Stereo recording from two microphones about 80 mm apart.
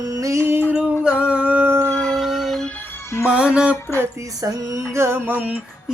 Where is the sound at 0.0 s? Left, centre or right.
Right.